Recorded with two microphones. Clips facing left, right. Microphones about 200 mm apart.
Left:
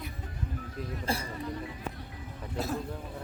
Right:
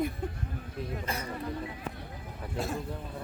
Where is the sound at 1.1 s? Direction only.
30° left (ahead or behind).